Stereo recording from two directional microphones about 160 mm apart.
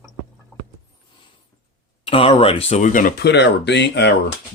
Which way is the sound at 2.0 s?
35° left (ahead or behind).